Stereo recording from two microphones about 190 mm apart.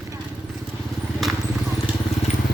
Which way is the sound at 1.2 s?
Centre (ahead or behind).